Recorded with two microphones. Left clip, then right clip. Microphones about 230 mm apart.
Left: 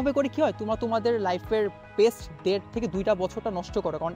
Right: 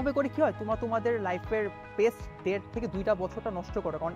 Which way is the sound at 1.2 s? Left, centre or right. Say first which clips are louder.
Left 5 dB; left.